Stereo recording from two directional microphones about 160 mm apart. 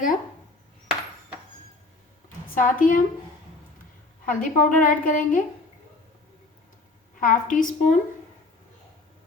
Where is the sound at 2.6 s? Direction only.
55° left (ahead or behind).